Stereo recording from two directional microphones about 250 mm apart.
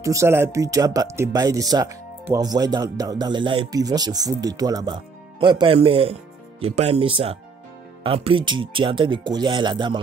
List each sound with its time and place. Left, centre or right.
0.0 s speech: centre